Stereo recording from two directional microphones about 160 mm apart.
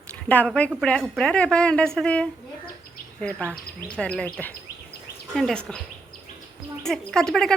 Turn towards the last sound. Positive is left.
turn(degrees=5)  # may be behind; listen again after turning